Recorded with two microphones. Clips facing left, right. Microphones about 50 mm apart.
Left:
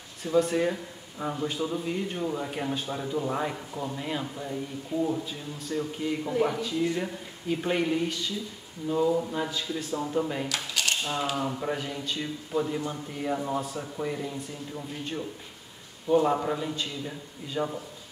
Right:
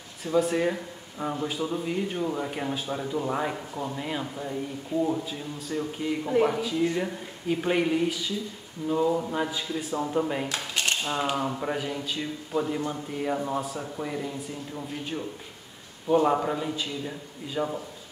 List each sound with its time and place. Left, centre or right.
0.2 s speech: centre
10.5 s a sound: right
11.1 s speech: centre